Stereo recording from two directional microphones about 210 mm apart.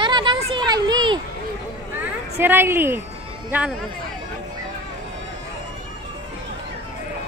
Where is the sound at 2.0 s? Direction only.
10° right (ahead or behind).